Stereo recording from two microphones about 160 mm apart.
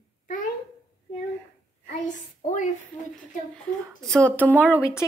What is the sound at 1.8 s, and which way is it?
Speech, 50° left (ahead or behind).